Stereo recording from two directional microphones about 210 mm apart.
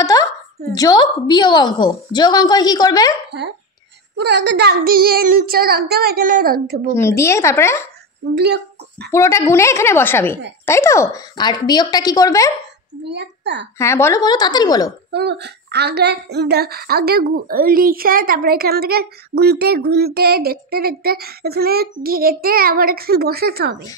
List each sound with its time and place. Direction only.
0.0 s a sound: 15° left (ahead or behind)
0.7 s a woman's voice: 20° left (ahead or behind)
4.2 s a child's voice: 55° right (ahead or behind)
7.0 s speech: 15° left (ahead or behind)
9.1 s speech: 15° left (ahead or behind)
13.0 s a child's voice: 55° right (ahead or behind)
13.7 s speech: 15° left (ahead or behind)
15.0 s a child's voice: 55° right (ahead or behind)